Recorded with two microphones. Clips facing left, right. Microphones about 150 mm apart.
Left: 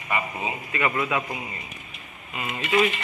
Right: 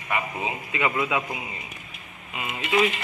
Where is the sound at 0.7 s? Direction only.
15° right (ahead or behind).